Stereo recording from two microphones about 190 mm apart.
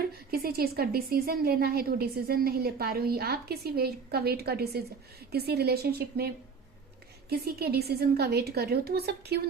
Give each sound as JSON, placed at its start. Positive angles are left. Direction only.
{"t": 0.3, "sound": "a woman's voice", "side_deg": -55}